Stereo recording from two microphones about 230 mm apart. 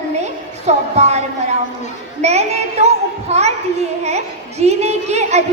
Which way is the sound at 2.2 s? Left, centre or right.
Right.